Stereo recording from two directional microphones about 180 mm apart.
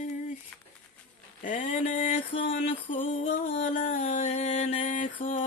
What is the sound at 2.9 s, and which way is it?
Music, 40° left (ahead or behind).